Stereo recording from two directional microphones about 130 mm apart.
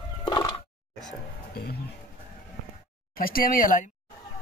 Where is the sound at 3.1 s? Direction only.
90° left.